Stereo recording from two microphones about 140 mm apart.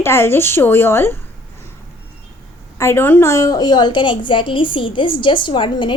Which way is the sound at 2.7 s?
15° left (ahead or behind).